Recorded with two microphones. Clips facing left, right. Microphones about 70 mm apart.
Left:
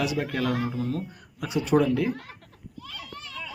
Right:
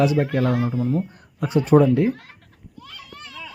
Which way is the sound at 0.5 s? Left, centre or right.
Right.